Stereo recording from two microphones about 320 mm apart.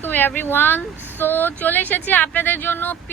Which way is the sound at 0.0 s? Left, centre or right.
Centre.